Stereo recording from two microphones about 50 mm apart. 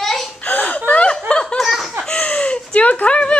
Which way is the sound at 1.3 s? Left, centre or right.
Centre.